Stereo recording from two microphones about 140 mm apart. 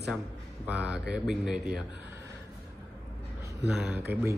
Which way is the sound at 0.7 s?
10° right (ahead or behind).